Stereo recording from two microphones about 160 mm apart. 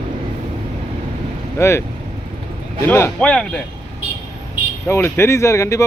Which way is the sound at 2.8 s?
15° left (ahead or behind).